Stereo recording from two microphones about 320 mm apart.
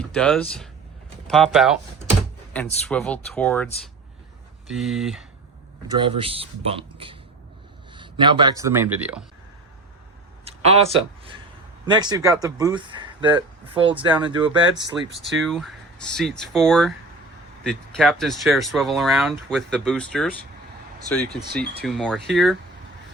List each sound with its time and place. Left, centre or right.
0.1 s speech: centre
4.7 s speech: centre
6.0 s speech: centre
8.2 s speech: centre
10.4 s speech: centre
14.9 s speech: centre
21.5 s speech: centre